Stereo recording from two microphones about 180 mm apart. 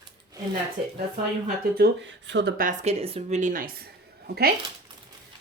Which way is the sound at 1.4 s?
70° right (ahead or behind).